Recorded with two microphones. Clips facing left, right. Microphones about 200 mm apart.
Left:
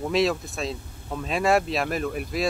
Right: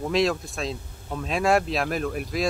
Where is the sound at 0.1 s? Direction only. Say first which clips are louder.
Even; centre (ahead or behind).